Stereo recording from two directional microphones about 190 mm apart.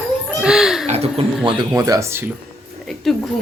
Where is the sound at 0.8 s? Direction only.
35° right (ahead or behind).